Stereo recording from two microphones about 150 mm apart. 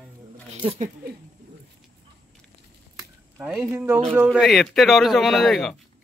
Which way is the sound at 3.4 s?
10° right (ahead or behind).